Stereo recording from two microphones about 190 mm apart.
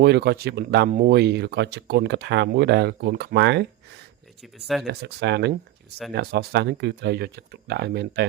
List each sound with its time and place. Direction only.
0.0 s speech: 60° right (ahead or behind)
4.4 s speech: centre (ahead or behind)
4.9 s speech: 60° right (ahead or behind)